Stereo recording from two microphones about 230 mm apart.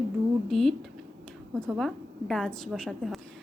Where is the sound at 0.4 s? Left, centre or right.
Centre.